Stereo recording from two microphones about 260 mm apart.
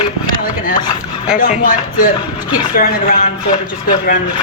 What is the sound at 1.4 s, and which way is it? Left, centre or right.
Speech, left.